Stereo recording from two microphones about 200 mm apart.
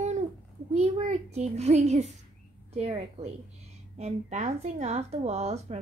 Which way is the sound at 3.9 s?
35° right (ahead or behind).